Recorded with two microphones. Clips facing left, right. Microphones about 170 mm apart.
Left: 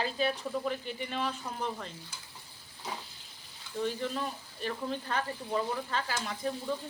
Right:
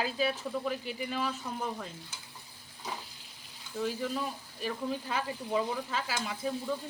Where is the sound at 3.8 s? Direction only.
5° right (ahead or behind).